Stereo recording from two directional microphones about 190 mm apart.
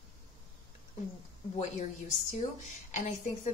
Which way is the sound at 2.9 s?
40° left (ahead or behind).